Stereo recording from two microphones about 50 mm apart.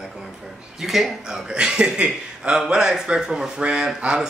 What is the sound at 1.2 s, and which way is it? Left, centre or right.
Speech, centre.